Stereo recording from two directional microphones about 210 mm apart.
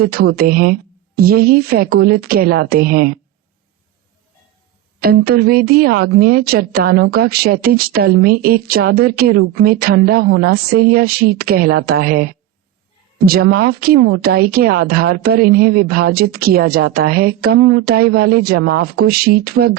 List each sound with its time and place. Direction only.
0.0 s speech: 45° right (ahead or behind)
4.9 s speech: 45° right (ahead or behind)